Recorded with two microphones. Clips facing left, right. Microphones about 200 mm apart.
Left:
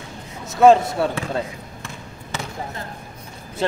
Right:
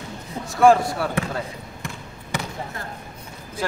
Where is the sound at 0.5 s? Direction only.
20° left (ahead or behind).